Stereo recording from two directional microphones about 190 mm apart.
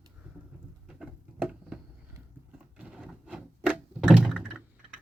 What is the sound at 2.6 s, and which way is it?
Thunk, 5° right (ahead or behind).